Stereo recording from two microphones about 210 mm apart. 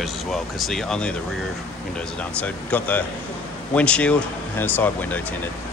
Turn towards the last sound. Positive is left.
turn(degrees=5)  # may be behind; listen again after turning